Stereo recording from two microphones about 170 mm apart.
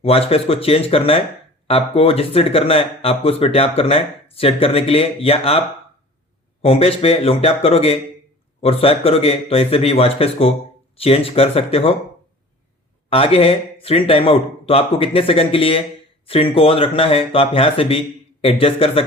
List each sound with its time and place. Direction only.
0.0 s speech: 35° left (ahead or behind)
13.1 s speech: 35° left (ahead or behind)